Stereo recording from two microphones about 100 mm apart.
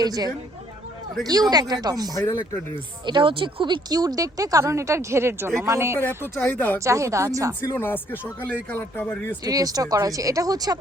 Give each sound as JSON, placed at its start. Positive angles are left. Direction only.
{"t": 0.0, "sound": "speech", "side_deg": -40}
{"t": 3.1, "sound": "speech", "side_deg": -55}
{"t": 3.9, "sound": "speech", "side_deg": -40}
{"t": 6.1, "sound": "speech", "side_deg": 20}
{"t": 6.7, "sound": "speech", "side_deg": -30}
{"t": 7.8, "sound": "speech", "side_deg": 20}
{"t": 9.4, "sound": "speech", "side_deg": -40}